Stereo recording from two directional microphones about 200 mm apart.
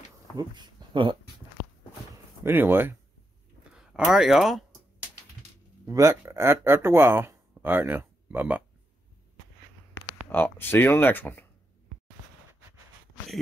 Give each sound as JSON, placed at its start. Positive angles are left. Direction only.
{"t": 0.4, "sound": "speech", "side_deg": -20}
{"t": 2.4, "sound": "speech", "side_deg": -10}
{"t": 5.9, "sound": "speech", "side_deg": -15}
{"t": 10.1, "sound": "speech", "side_deg": 10}